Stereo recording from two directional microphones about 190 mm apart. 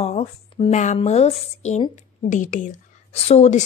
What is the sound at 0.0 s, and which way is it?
A woman's voice, 35° left (ahead or behind).